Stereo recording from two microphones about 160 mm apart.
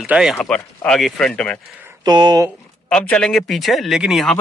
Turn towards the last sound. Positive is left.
turn(degrees=0)  # may be behind; listen again after turning